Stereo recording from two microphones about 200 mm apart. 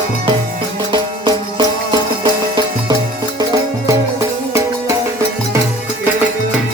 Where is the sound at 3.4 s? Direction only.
15° right (ahead or behind).